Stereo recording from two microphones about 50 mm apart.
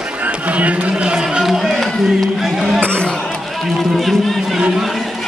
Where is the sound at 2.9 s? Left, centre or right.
Centre.